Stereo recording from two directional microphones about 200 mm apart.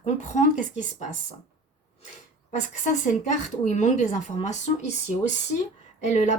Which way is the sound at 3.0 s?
35° left (ahead or behind).